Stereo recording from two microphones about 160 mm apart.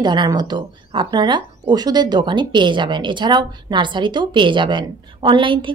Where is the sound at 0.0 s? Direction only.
30° right (ahead or behind).